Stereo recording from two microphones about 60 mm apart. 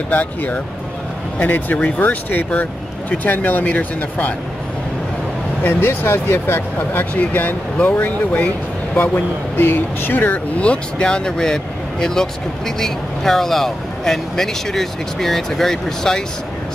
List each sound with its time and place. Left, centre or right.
0.1 s speech: left
5.6 s speech: left; by 16.2 s centre